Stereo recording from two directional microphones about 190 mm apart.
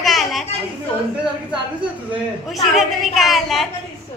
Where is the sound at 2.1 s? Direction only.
Centre (ahead or behind).